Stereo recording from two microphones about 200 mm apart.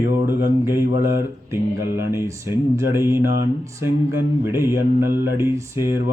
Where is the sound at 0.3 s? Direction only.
15° right (ahead or behind).